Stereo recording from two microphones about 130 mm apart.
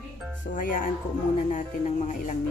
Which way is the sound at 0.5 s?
90° left.